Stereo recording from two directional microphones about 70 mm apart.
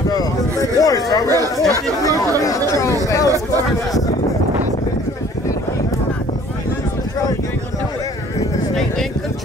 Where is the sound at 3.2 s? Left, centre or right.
Right.